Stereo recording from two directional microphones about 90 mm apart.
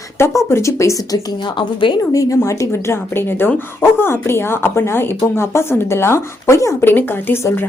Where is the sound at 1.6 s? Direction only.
60° left (ahead or behind).